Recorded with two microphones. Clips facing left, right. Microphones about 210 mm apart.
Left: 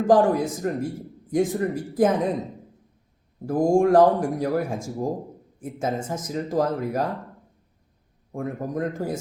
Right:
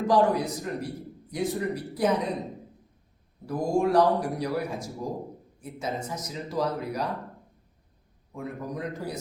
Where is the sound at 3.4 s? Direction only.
50° left (ahead or behind).